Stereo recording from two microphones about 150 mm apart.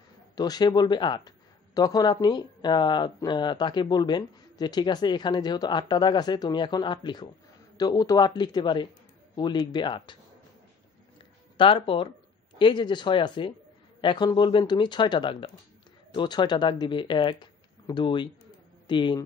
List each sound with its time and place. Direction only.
0.4 s speech: 25° left (ahead or behind)
11.5 s speech: 35° left (ahead or behind)